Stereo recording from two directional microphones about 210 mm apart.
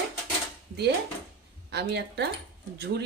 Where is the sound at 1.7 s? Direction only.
55° right (ahead or behind).